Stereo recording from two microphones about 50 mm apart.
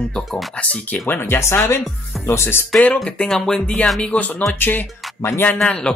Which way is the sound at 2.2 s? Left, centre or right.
Left.